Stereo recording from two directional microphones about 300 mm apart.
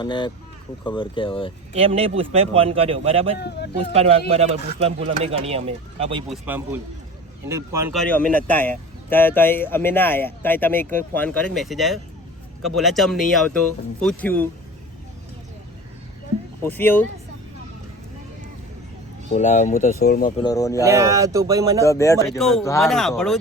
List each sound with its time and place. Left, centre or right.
0.0 s speech: centre
1.7 s speech: centre
3.3 s speech: left
4.3 s speech: centre
6.2 s speech: centre
8.0 s speech: centre
16.6 s speech: centre
19.3 s speech: left
20.4 s speech: centre
20.8 s speech: centre
21.8 s speech: centre